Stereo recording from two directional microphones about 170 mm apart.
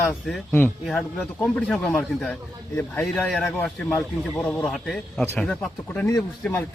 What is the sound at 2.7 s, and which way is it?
A man's voice, 15° left (ahead or behind).